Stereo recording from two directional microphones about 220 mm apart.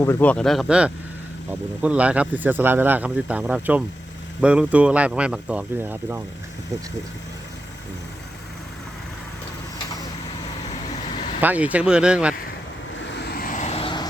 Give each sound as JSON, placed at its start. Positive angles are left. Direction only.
{"t": 0.0, "sound": "speech", "side_deg": 10}
{"t": 11.3, "sound": "speech", "side_deg": -5}
{"t": 13.0, "sound": "vehicle", "side_deg": 50}